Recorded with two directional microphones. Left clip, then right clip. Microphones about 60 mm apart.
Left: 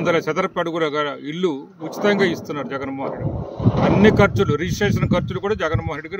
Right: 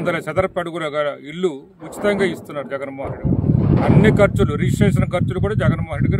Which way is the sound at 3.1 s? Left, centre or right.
Right.